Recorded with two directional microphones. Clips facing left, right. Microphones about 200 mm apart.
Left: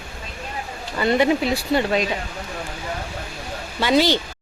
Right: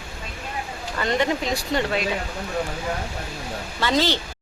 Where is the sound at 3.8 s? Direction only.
15° left (ahead or behind).